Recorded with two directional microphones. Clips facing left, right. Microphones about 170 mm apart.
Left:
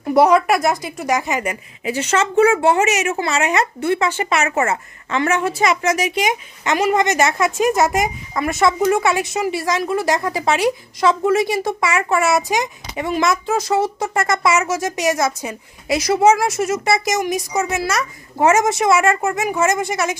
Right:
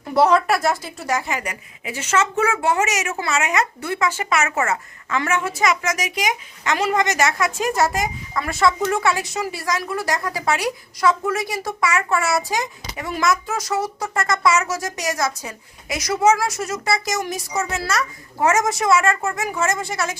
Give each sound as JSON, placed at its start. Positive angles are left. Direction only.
{"t": 0.1, "sound": "a woman's voice", "side_deg": 15}